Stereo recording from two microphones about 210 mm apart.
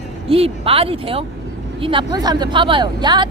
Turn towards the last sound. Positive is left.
turn(degrees=-20)  # may be behind; listen again after turning